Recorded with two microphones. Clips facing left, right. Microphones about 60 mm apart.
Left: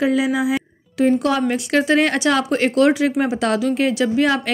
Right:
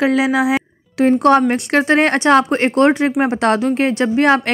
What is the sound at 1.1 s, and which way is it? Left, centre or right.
A woman's voice, right.